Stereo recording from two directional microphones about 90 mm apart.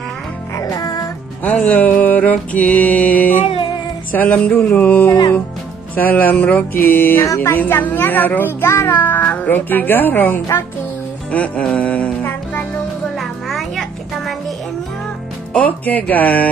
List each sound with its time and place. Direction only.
0.6 s music: 40° left (ahead or behind)
1.4 s music: 15° left (ahead or behind)
4.1 s a child's voice: 20° left (ahead or behind)
7.2 s a child's voice: 30° left (ahead or behind)
11.3 s music: 15° left (ahead or behind)
13.2 s music: centre (ahead or behind)
15.5 s a child's voice: 15° left (ahead or behind)